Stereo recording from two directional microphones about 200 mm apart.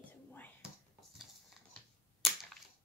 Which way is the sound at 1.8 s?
5° left (ahead or behind).